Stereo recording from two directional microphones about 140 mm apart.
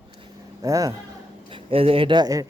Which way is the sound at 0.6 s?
25° right (ahead or behind).